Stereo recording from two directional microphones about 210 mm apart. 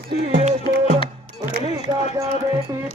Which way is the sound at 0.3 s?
35° right (ahead or behind).